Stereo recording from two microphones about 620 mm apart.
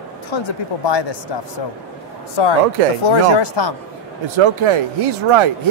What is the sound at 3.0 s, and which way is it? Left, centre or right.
Speech, left.